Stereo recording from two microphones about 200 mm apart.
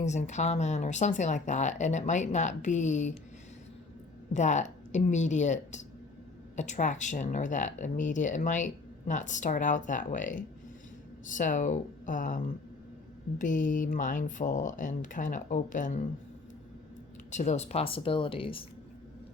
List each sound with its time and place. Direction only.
0.0 s speech: 35° left (ahead or behind)
4.3 s speech: 35° left (ahead or behind)
13.4 s speech: 40° left (ahead or behind)
17.3 s speech: 35° left (ahead or behind)